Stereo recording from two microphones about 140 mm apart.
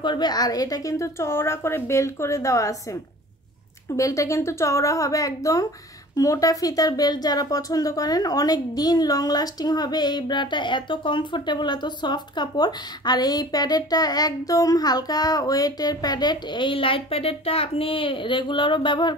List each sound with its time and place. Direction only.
0.0 s speech: 30° left (ahead or behind)